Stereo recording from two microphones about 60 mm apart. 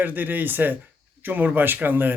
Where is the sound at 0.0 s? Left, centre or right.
Right.